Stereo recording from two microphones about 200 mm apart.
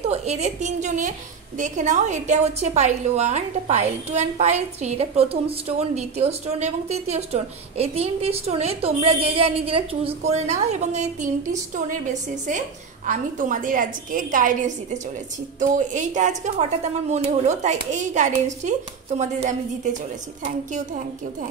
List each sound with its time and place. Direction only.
0.1 s a woman's voice: 35° right (ahead or behind)